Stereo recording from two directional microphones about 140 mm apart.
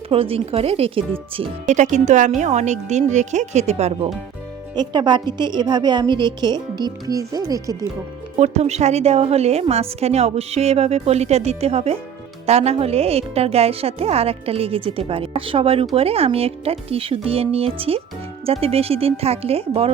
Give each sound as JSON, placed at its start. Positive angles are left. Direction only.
{"t": 0.1, "sound": "a woman's voice", "side_deg": -40}
{"t": 1.6, "sound": "speech", "side_deg": -60}
{"t": 4.7, "sound": "a woman's voice", "side_deg": -30}
{"t": 8.4, "sound": "a woman's voice", "side_deg": -50}